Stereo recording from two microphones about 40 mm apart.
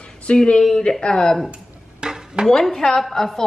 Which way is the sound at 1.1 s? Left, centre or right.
Centre.